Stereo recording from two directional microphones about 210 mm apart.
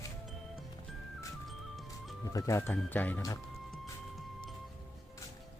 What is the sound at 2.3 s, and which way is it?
Speech, 15° left (ahead or behind).